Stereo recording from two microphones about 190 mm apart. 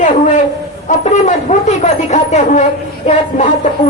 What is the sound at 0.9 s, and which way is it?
Speech, 40° left (ahead or behind).